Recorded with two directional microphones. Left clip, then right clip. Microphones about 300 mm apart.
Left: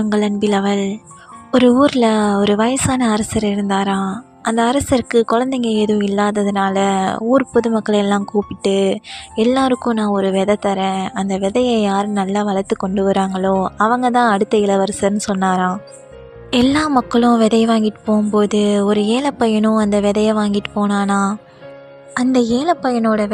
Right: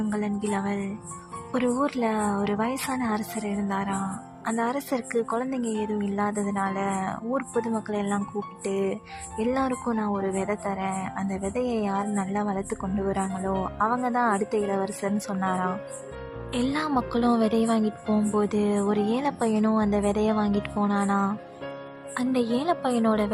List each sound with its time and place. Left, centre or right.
0.1 s speech: left